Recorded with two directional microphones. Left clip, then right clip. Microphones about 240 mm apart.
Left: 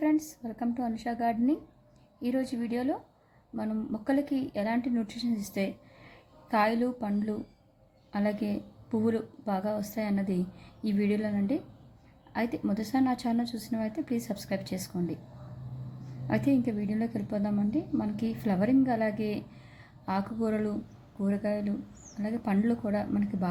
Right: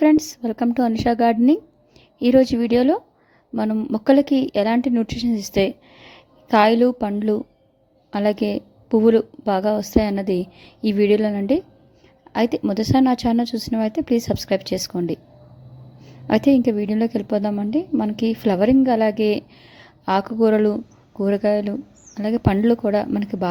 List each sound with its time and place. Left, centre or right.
0.0 s a woman's voice: right
16.2 s a woman's voice: right